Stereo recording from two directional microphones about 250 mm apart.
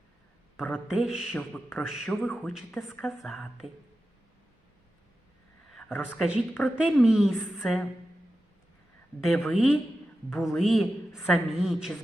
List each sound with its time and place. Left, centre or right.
0.5 s a man's voice: centre
5.7 s a man's voice: centre
9.2 s a man's voice: centre